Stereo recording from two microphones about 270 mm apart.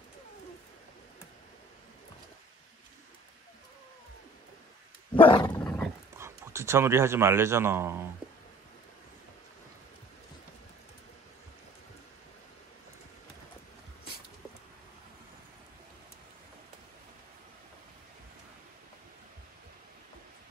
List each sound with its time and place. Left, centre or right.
5.1 s dog: centre
5.5 s dog: centre
6.1 s speech: centre